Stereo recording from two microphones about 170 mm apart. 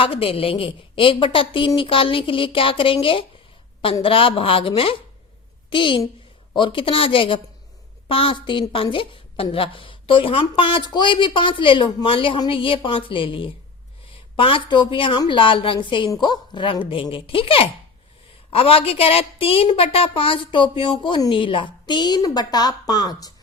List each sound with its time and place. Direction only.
0.0 s a woman's voice: 35° left (ahead or behind)